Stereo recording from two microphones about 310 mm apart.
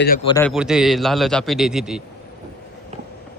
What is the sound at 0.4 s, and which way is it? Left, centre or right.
A man's voice, centre.